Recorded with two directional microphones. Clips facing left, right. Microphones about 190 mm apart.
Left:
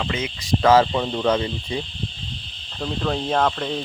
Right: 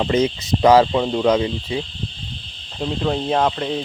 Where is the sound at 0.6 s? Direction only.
15° right (ahead or behind).